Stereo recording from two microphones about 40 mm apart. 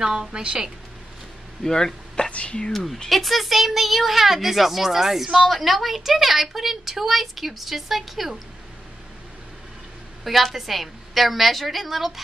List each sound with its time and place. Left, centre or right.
0.0 s a woman's voice: centre
1.6 s speech: centre
2.3 s speech: left
2.7 s speech: centre
10.2 s speech: centre